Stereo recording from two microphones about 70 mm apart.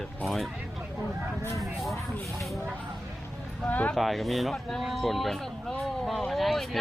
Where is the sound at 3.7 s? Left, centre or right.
Left.